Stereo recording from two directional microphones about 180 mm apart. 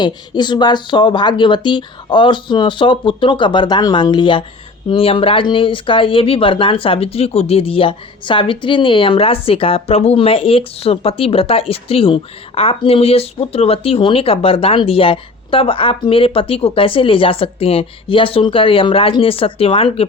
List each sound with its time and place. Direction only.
0.0 s speech: 25° left (ahead or behind)